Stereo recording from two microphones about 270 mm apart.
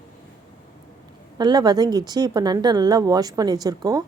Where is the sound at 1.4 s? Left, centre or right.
Centre.